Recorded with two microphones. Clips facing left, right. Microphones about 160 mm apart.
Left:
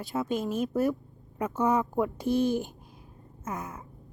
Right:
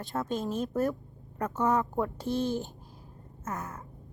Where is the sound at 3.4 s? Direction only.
15° left (ahead or behind).